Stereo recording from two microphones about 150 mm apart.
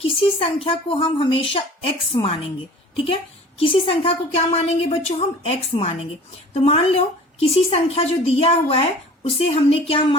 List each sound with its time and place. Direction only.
0.2 s a woman's voice: 35° left (ahead or behind)